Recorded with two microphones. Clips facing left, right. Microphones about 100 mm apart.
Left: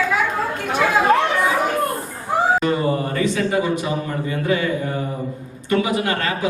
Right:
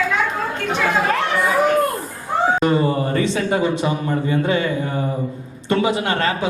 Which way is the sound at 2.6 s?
30° right (ahead or behind).